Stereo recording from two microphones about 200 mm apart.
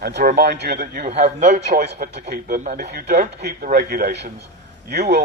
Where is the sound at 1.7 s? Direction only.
50° right (ahead or behind).